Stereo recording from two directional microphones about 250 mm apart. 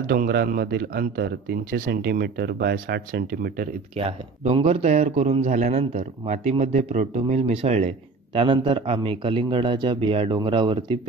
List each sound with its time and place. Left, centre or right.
0.1 s speech: right
3.9 s a man's voice: right